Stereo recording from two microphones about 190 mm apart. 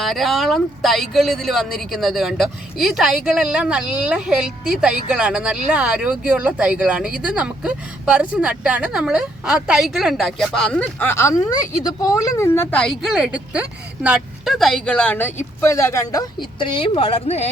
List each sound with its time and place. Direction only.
0.0 s a woman's voice: centre (ahead or behind); by 17.5 s 35° left (ahead or behind)